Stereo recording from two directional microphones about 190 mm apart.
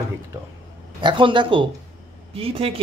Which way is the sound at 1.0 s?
25° right (ahead or behind).